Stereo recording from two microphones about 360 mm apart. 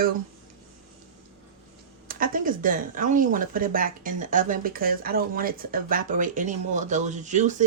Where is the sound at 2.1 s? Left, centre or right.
Right.